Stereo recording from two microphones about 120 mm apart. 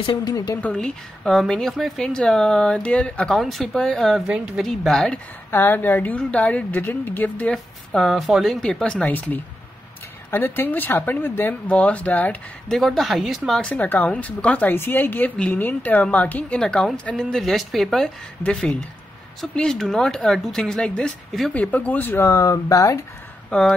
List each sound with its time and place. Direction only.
0.0 s speech: 45° left (ahead or behind)
0.6 s speech: 10° left (ahead or behind)
5.5 s a woman's voice: 15° left (ahead or behind)
7.5 s a woman's voice: 5° left (ahead or behind)
12.6 s a woman's voice: 5° left (ahead or behind); by 22.9 s 25° left (ahead or behind)